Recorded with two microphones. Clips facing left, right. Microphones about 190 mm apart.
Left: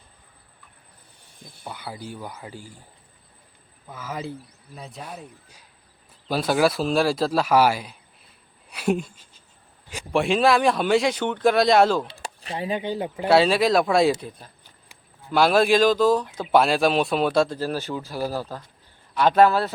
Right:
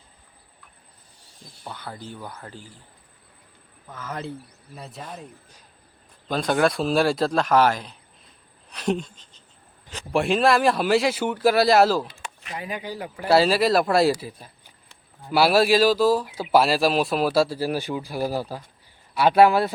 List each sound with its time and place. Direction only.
1.6 s speech: 10° left (ahead or behind)
3.8 s speech: 10° left (ahead or behind)
8.7 s a sound: 10° left (ahead or behind)
10.1 s speech: centre (ahead or behind)
12.0 s speech: 35° left (ahead or behind)
13.2 s speech: centre (ahead or behind)